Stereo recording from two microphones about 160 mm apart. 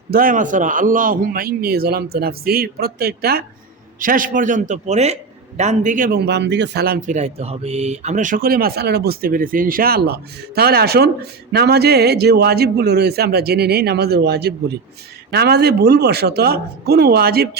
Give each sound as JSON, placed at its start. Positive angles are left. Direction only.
{"t": 0.1, "sound": "a man's voice", "side_deg": -60}
{"t": 4.0, "sound": "a man's voice", "side_deg": -60}